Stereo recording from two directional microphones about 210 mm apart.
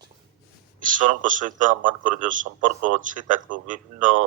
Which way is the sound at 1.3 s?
40° right (ahead or behind).